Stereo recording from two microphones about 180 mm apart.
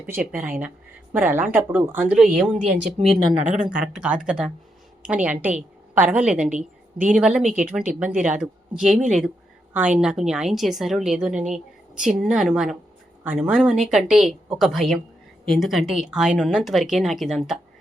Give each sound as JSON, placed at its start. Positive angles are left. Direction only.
{"t": 0.1, "sound": "a woman's voice", "side_deg": -5}
{"t": 2.8, "sound": "speech", "side_deg": -40}
{"t": 3.9, "sound": "a woman's voice", "side_deg": -5}